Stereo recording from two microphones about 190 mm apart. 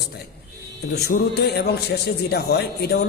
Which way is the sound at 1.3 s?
60° left (ahead or behind).